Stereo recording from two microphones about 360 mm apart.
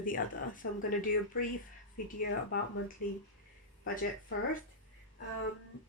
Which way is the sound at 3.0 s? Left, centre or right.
Left.